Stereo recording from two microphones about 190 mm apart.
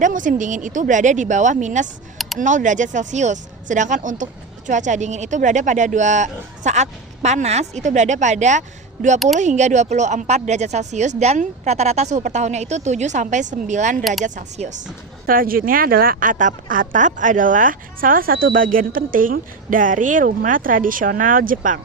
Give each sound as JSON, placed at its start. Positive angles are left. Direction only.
{"t": 0.0, "sound": "speech", "side_deg": -45}
{"t": 9.1, "sound": "speech", "side_deg": 0}
{"t": 9.4, "sound": "speech", "side_deg": -40}